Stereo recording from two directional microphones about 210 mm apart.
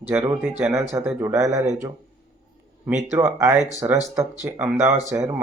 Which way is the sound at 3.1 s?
10° right (ahead or behind).